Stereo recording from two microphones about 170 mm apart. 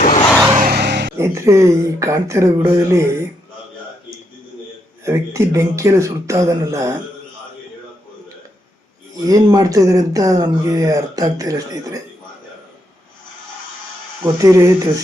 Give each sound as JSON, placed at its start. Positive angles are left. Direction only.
{"t": 0.0, "sound": "a sound", "side_deg": 40}
{"t": 0.6, "sound": "vehicle", "side_deg": -70}
{"t": 1.1, "sound": "speech", "side_deg": -15}
{"t": 5.0, "sound": "speech", "side_deg": -15}
{"t": 9.2, "sound": "speech", "side_deg": -20}
{"t": 14.3, "sound": "speech", "side_deg": -20}